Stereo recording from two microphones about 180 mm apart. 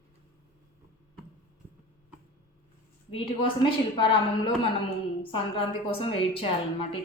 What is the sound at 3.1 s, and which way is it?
A woman's voice, 30° left (ahead or behind).